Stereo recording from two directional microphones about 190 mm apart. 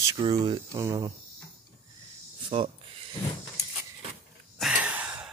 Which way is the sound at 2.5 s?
30° right (ahead or behind).